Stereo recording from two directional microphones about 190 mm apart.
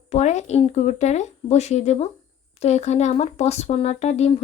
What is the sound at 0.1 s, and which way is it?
Speech, 35° left (ahead or behind).